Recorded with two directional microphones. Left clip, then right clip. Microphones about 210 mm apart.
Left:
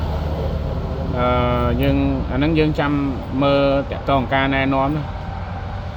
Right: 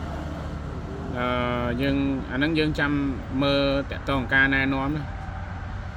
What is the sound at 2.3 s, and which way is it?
Speech, 75° right (ahead or behind).